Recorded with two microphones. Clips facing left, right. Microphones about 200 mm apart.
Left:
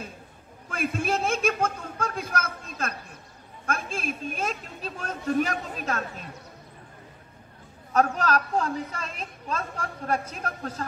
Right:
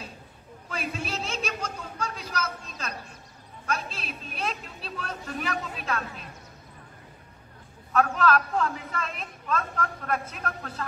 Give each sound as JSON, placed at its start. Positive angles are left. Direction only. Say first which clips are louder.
{"t": 0.7, "sound": "a sound", "louder": "left 6 dB", "side_deg": 50}
{"t": 3.6, "sound": "a woman's voice", "louder": "left 3 dB", "side_deg": 50}
{"t": 7.9, "sound": "a woman's voice", "louder": "even", "side_deg": 40}